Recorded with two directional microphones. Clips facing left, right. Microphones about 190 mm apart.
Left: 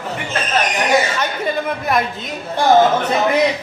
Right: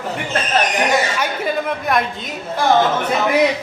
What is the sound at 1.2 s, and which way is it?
Speech, centre (ahead or behind).